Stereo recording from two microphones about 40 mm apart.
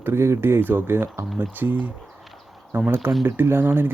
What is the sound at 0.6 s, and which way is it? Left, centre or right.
Speech, right.